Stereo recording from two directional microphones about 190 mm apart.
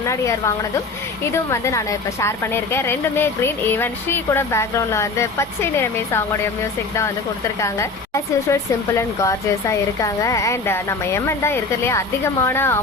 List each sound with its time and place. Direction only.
0.0 s speech: 15° left (ahead or behind)